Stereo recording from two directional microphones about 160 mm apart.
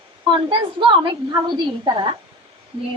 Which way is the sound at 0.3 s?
30° right (ahead or behind).